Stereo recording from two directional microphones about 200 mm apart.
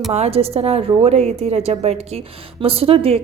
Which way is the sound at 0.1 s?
30° right (ahead or behind).